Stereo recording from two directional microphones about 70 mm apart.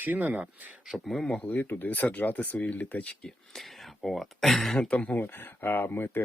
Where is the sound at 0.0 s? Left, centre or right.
Right.